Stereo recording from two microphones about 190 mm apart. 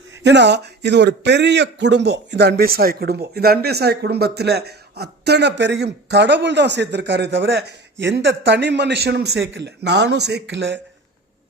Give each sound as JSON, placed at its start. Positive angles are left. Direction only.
{"t": 0.2, "sound": "speech", "side_deg": -65}